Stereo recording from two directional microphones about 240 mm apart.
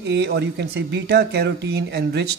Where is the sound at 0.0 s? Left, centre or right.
Right.